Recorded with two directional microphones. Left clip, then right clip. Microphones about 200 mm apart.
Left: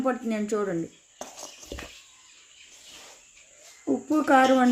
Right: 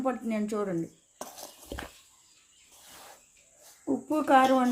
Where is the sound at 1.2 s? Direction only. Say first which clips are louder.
Left 3 dB; 20° right (ahead or behind).